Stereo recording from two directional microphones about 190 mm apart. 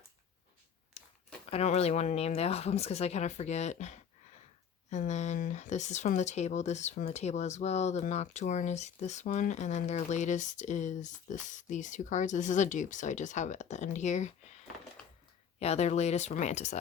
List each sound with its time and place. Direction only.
0.9 s crumpling: 35° left (ahead or behind)
1.5 s speech: 35° left (ahead or behind)
15.0 s a sound: 5° left (ahead or behind)
15.5 s speech: 35° left (ahead or behind)